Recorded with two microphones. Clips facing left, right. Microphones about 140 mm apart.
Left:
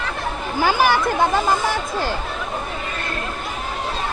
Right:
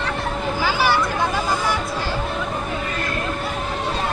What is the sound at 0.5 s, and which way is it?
Children playing, 50° left (ahead or behind).